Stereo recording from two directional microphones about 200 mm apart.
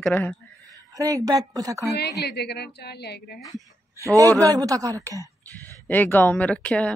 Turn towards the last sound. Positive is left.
turn(degrees=5)  # may be behind; listen again after turning